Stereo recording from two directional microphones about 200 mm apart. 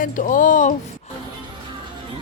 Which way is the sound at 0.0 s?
40° left (ahead or behind).